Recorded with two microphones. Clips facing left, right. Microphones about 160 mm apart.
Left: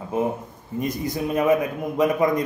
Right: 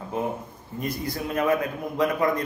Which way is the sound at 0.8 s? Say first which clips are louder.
Left 4 dB; 20° left (ahead or behind).